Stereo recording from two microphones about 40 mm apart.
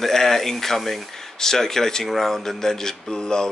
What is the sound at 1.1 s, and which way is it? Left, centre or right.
Speech, centre.